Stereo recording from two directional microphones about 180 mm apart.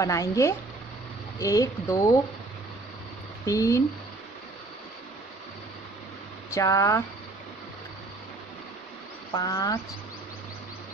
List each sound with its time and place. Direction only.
0.0 s a woman's voice: 20° left (ahead or behind)
3.4 s a woman's voice: 15° left (ahead or behind)
6.5 s a woman's voice: 15° left (ahead or behind)
9.3 s speech: 20° left (ahead or behind)